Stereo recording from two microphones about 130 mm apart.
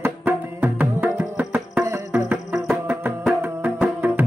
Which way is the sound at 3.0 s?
15° right (ahead or behind).